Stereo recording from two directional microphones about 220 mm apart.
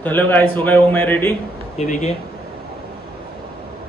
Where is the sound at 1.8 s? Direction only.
30° left (ahead or behind).